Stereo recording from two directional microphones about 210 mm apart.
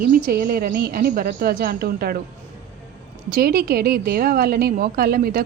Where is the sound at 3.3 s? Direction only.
45° right (ahead or behind).